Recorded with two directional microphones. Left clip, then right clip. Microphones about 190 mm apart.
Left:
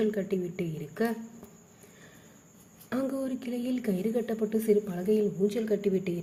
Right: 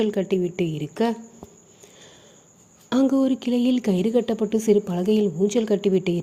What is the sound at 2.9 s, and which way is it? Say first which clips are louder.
A woman's voice: right 11 dB; 35° right (ahead or behind).